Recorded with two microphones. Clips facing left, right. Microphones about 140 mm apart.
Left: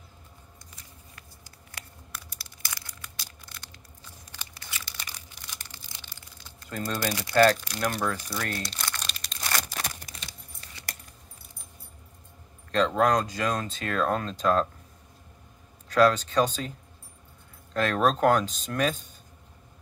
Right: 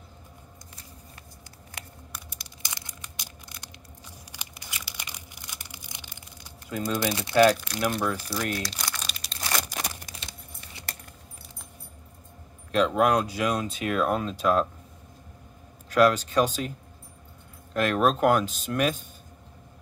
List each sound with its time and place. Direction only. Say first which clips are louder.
2.3 s a sound: even; 20° right (ahead or behind)
6.8 s speech: right 3 dB; 20° right (ahead or behind)
7.6 s speech: right 2 dB; centre (ahead or behind)
8.8 s crumpling: even; 5° right (ahead or behind)
9.6 s tearing: right 1 dB; 15° right (ahead or behind)
12.7 s speech: right 1 dB; 10° right (ahead or behind)
15.9 s speech: right 1 dB; 10° right (ahead or behind)
17.7 s speech: right 1 dB; 10° right (ahead or behind)